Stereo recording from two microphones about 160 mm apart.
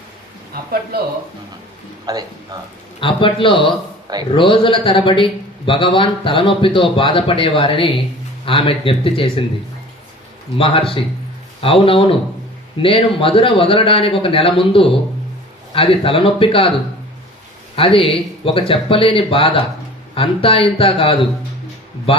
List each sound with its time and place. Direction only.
0.5 s speech: 75° right (ahead or behind)
2.1 s speech: 25° right (ahead or behind)
3.0 s speech: 35° left (ahead or behind)
10.6 s speech: 35° left (ahead or behind)
17.7 s speech: 35° left (ahead or behind)